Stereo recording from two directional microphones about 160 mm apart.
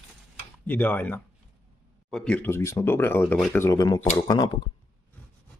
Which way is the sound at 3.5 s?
20° left (ahead or behind).